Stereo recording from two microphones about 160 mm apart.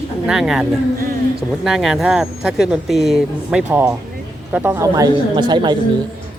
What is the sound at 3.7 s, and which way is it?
Speech, 15° right (ahead or behind).